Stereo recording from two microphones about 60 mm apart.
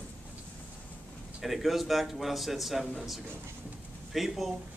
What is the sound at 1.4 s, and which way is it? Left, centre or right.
A man's voice, centre.